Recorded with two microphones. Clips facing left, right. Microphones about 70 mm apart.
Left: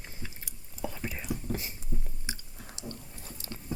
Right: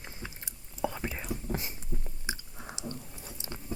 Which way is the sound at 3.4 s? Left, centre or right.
Right.